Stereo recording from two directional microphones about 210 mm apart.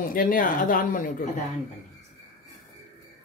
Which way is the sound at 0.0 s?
40° left (ahead or behind).